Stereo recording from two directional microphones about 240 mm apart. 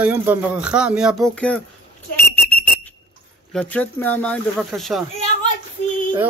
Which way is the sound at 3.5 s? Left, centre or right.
Centre.